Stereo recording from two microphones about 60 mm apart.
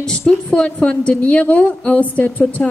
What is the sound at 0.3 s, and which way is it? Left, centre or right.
A woman's voice, centre.